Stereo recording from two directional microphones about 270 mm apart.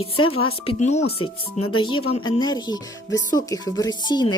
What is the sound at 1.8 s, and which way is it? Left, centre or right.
Speech, centre.